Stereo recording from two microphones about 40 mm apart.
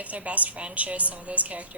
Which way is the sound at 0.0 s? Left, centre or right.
Right.